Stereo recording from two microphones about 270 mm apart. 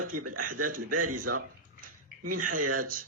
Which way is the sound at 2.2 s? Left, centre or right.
Right.